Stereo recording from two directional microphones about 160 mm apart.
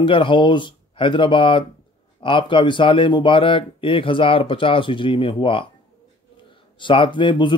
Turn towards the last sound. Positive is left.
turn(degrees=30)  # may be behind; listen again after turning